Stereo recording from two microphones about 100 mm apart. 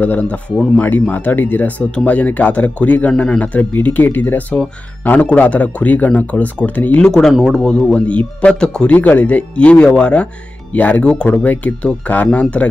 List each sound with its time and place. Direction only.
0.0 s speech: 15° left (ahead or behind)
7.1 s speech: 5° left (ahead or behind)